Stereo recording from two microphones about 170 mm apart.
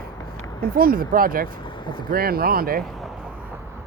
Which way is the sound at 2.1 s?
60° right (ahead or behind).